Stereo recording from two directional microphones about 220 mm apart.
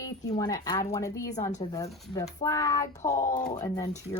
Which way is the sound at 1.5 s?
25° left (ahead or behind).